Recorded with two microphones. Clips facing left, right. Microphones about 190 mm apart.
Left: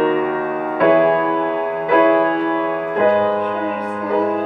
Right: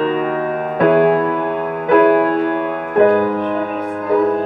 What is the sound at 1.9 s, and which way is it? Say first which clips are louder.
Music: right 3 dB; 55° right (ahead or behind).